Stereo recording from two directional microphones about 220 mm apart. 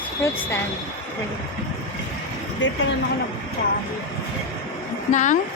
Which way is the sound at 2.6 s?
55° left (ahead or behind).